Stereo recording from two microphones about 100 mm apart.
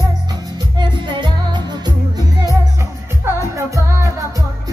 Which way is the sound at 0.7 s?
50° right (ahead or behind).